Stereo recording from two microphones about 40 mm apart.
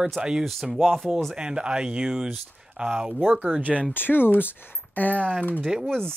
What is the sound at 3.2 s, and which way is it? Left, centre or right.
Speech, right.